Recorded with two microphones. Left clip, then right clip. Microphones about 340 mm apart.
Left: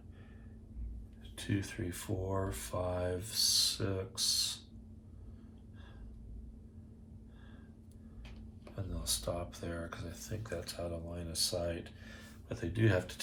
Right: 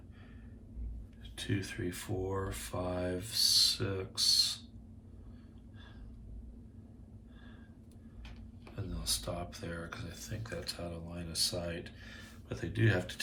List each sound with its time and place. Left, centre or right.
1.4 s speech: centre
8.6 s speech: centre